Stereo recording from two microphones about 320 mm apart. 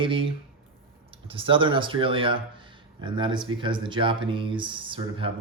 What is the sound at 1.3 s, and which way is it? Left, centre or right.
Speech, centre.